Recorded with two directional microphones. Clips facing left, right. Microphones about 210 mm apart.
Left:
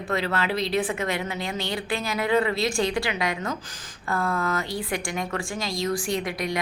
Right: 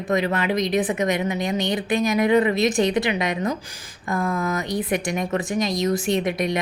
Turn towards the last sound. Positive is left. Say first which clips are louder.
# right 5 dB
turn(degrees=-20)  # may be behind; listen again after turning